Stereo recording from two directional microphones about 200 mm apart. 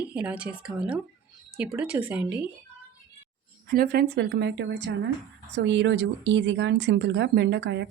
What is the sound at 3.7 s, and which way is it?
Speech, 45° right (ahead or behind).